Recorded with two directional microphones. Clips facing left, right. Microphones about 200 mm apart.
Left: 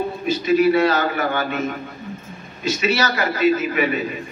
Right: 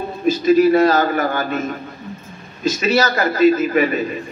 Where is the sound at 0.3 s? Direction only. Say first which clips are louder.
Right 4 dB; 40° right (ahead or behind).